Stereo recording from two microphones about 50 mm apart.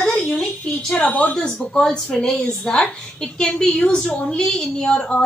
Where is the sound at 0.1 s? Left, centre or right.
Centre.